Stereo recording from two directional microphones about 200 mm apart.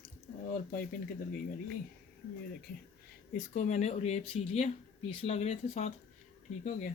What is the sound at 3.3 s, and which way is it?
Speech, 35° left (ahead or behind).